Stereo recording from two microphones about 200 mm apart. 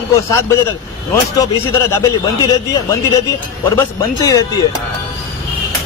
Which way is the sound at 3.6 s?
15° left (ahead or behind).